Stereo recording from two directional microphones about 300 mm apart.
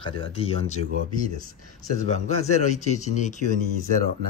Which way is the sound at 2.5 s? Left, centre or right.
Left.